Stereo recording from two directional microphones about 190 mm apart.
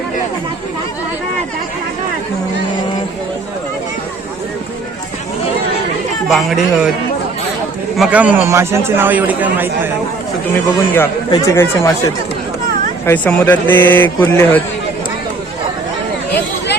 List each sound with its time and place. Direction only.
6.2 s a man's voice: centre (ahead or behind)
7.9 s a man's voice: 5° right (ahead or behind)
10.5 s speech: 10° left (ahead or behind)